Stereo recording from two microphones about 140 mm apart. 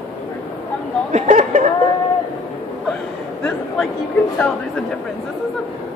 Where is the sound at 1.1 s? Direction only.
60° right (ahead or behind).